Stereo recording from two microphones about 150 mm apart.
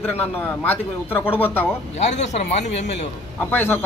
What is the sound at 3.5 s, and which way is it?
Speech, 15° left (ahead or behind).